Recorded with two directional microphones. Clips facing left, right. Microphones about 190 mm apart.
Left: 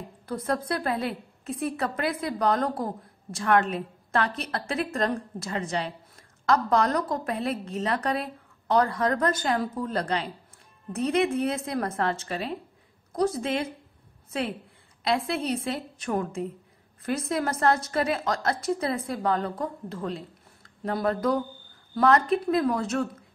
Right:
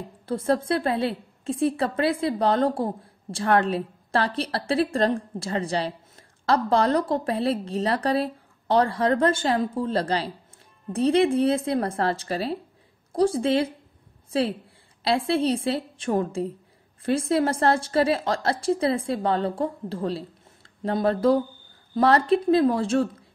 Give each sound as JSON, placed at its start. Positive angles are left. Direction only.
{"t": 0.3, "sound": "a woman's voice", "side_deg": -25}